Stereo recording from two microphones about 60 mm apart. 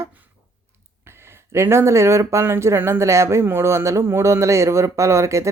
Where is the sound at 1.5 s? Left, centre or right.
Right.